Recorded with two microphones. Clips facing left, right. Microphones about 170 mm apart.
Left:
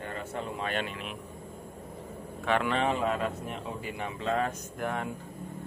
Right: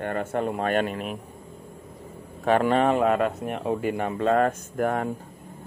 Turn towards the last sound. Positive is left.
turn(degrees=-50)  # may be behind; listen again after turning